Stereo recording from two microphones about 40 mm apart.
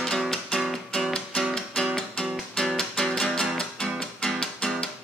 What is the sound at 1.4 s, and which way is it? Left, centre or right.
Music, centre.